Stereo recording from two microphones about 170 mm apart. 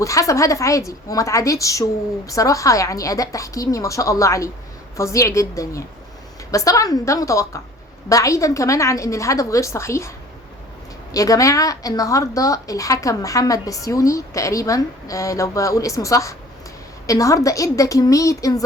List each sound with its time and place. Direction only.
0.0 s a woman's voice: 20° left (ahead or behind)
11.1 s a woman's voice: 20° left (ahead or behind)